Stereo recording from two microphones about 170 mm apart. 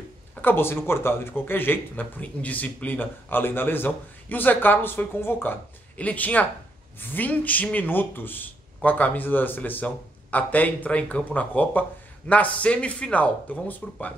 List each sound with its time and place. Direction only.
0.4 s speech: 10° left (ahead or behind)